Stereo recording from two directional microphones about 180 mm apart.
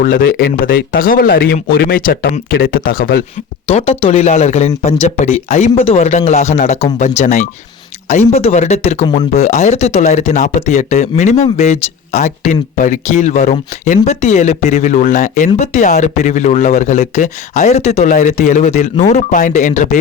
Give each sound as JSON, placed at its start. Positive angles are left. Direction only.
{"t": 0.0, "sound": "speech", "side_deg": 50}
{"t": 3.7, "sound": "speech", "side_deg": 35}